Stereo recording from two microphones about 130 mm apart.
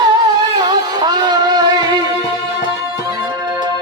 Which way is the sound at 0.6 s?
30° right (ahead or behind).